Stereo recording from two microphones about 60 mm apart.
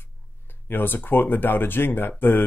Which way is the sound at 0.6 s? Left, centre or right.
Left.